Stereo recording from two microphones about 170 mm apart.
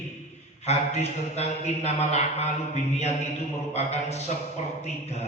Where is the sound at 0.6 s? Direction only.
40° left (ahead or behind).